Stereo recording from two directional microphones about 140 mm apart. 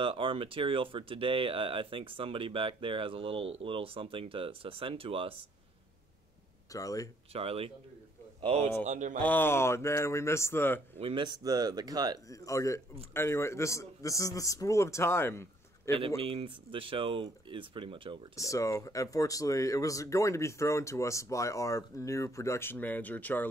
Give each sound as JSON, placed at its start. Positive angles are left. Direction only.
{"t": 0.0, "sound": "speech", "side_deg": -40}
{"t": 6.7, "sound": "speech", "side_deg": 25}
{"t": 7.3, "sound": "a man's voice", "side_deg": -45}
{"t": 8.8, "sound": "speech", "side_deg": -60}
{"t": 9.2, "sound": "speech", "side_deg": 15}
{"t": 11.0, "sound": "speech", "side_deg": -40}
{"t": 12.3, "sound": "speech", "side_deg": 25}
{"t": 16.2, "sound": "speech", "side_deg": -40}
{"t": 18.3, "sound": "speech", "side_deg": 20}